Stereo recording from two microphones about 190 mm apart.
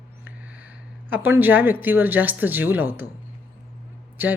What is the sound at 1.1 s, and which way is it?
A woman's voice, 10° right (ahead or behind).